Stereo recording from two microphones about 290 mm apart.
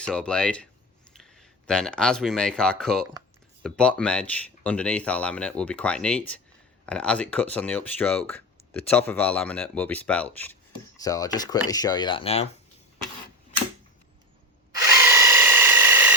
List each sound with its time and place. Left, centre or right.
0.0 s speech: centre; by 12.5 s left
14.8 s tools: centre